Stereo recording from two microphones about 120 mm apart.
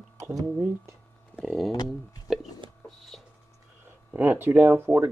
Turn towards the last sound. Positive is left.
turn(degrees=-15)  # may be behind; listen again after turning